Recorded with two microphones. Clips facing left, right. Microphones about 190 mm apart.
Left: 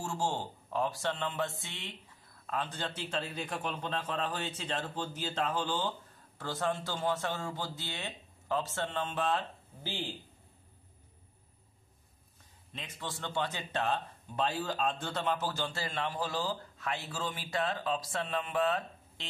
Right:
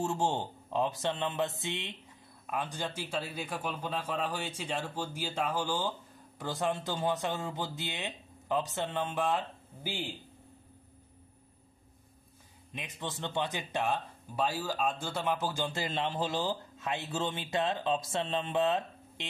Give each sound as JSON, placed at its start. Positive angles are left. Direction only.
{"t": 0.0, "sound": "a man's voice", "side_deg": -20}
{"t": 12.7, "sound": "speech", "side_deg": -20}